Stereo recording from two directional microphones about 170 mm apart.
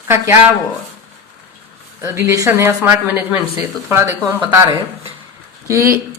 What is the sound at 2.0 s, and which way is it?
Speech, 20° right (ahead or behind).